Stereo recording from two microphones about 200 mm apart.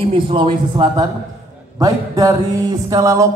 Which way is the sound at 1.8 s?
20° right (ahead or behind).